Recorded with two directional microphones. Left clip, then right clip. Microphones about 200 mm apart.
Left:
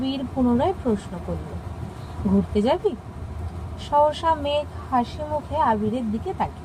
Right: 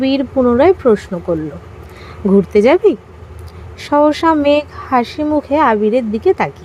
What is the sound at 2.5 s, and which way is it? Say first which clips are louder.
Speech: right 12 dB; 45° right (ahead or behind).